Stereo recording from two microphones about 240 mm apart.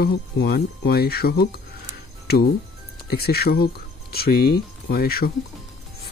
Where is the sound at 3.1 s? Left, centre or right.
Left.